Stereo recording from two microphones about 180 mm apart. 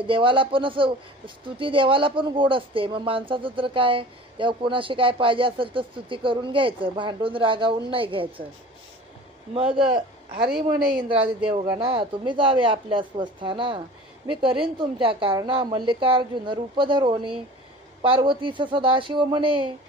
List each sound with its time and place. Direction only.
0.0 s speech: 30° right (ahead or behind)
9.8 s a man's voice: 30° right (ahead or behind)